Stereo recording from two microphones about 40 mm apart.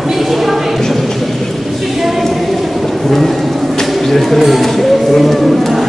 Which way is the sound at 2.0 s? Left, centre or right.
Centre.